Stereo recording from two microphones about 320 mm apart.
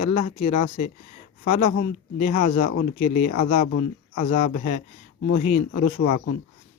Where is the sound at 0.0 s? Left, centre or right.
Left.